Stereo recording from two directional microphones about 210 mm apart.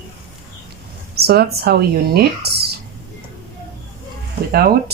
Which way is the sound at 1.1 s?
50° right (ahead or behind).